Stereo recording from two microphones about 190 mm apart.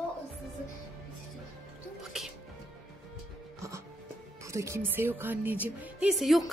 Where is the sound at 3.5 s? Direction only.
15° right (ahead or behind).